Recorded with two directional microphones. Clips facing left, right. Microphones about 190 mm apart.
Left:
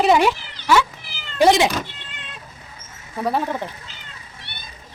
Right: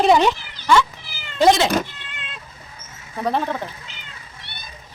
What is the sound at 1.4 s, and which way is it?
Speech, 15° left (ahead or behind).